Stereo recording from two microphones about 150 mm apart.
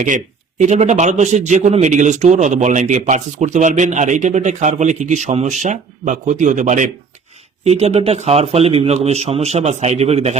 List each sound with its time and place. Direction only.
0.6 s a man's voice: 50° right (ahead or behind)
7.6 s a man's voice: 45° right (ahead or behind)